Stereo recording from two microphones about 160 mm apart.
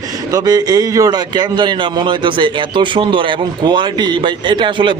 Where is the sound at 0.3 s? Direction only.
25° right (ahead or behind).